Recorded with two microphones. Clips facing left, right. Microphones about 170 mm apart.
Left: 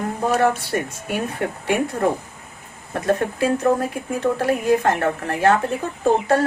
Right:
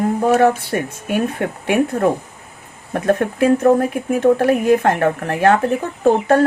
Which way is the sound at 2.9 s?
50° right (ahead or behind).